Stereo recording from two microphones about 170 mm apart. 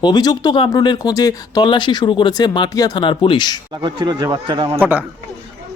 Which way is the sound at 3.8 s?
25° right (ahead or behind).